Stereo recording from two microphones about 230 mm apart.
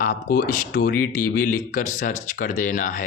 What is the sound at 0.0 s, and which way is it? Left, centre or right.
Speech, left.